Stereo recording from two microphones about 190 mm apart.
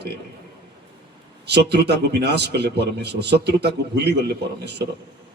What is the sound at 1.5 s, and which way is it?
A man's voice, 60° right (ahead or behind).